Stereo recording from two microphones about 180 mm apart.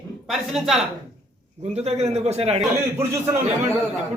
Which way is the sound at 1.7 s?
35° right (ahead or behind).